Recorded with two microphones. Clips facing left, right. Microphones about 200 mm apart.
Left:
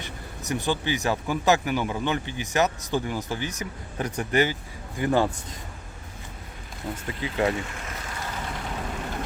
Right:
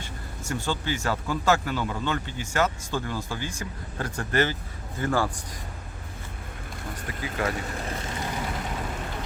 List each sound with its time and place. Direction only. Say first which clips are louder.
0.0 s a man's voice: left 1 dB; 15° left (ahead or behind)
7.2 s a man's voice: left 4 dB; 25° left (ahead or behind)
7.7 s speech: right 5 dB; 35° right (ahead or behind)